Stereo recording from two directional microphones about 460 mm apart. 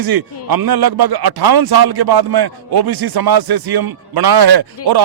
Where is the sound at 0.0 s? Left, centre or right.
Right.